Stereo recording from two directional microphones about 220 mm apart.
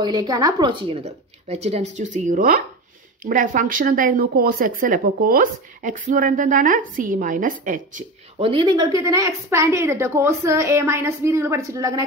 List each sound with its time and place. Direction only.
0.0 s a woman's voice: 20° right (ahead or behind); by 8.0 s 35° right (ahead or behind)
8.4 s a woman's voice: 25° right (ahead or behind)